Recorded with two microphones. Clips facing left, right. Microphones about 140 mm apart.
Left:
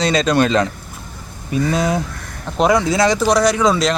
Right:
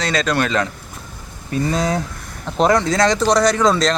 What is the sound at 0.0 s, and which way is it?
Speech, 15° left (ahead or behind).